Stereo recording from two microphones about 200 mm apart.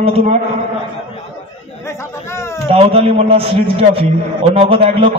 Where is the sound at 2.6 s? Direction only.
30° right (ahead or behind).